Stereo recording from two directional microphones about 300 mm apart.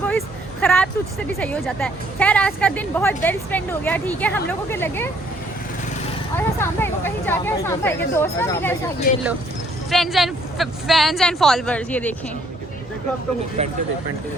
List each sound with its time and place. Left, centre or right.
0.1 s a sound: centre
1.4 s a woman's voice: centre
6.3 s speech: centre
9.1 s speech: left
9.9 s a woman's voice: centre
13.6 s speech: right